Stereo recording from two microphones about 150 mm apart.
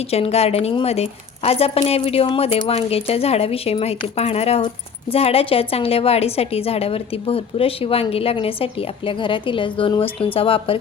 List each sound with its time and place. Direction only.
0.1 s a woman's voice: 45° left (ahead or behind)